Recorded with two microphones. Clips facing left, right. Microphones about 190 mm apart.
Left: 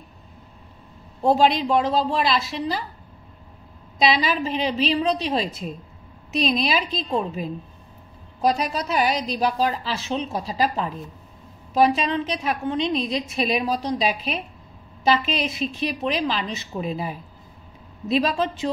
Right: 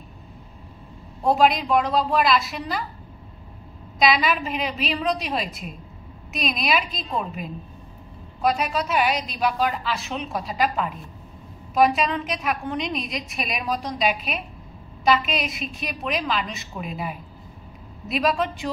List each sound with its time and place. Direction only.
1.3 s a woman's voice: 30° left (ahead or behind)
4.1 s a woman's voice: 30° left (ahead or behind)